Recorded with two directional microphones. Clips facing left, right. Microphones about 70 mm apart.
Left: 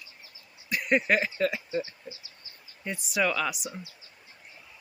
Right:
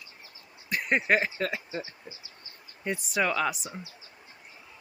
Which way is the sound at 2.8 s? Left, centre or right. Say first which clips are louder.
Right 1 dB; right.